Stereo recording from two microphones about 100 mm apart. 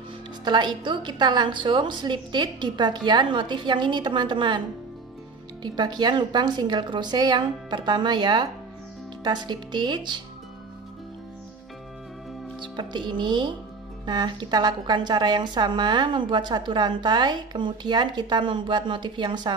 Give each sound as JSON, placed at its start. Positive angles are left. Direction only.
{"t": 0.5, "sound": "a woman's voice", "side_deg": -50}
{"t": 12.5, "sound": "a woman's voice", "side_deg": -50}